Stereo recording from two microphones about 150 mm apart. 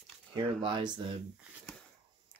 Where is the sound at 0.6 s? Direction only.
30° right (ahead or behind).